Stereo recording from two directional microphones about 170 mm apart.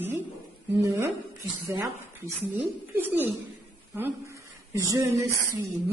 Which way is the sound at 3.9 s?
15° right (ahead or behind).